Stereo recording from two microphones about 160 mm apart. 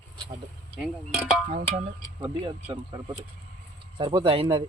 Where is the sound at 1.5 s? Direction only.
35° right (ahead or behind).